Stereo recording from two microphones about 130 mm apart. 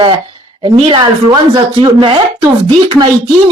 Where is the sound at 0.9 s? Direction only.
35° right (ahead or behind).